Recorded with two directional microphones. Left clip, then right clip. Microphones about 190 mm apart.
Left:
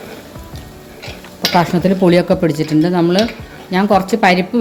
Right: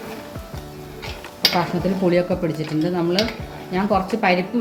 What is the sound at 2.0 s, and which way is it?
Speech, 65° left (ahead or behind).